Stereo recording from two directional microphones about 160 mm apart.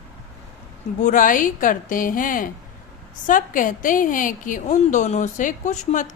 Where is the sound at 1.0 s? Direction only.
55° left (ahead or behind).